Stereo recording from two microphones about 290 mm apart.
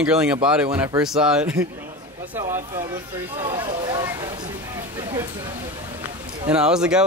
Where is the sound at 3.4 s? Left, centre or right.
Centre.